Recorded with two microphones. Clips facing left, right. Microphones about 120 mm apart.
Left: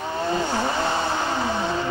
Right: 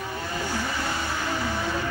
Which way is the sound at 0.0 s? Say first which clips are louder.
Left 7 dB; 25° left (ahead or behind).